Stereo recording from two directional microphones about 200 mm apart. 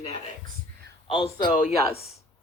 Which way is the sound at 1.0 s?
25° left (ahead or behind).